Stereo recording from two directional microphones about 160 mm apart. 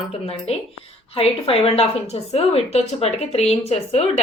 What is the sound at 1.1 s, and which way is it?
A woman's voice, 35° left (ahead or behind).